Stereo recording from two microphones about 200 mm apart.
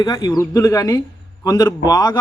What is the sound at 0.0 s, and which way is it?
A man's voice, 20° left (ahead or behind).